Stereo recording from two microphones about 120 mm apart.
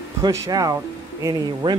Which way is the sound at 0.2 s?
30° right (ahead or behind).